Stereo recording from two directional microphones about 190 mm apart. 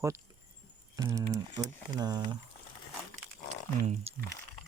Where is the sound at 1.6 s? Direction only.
20° right (ahead or behind).